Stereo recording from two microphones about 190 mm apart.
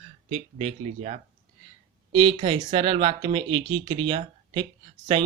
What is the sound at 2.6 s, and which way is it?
Speech, 30° right (ahead or behind).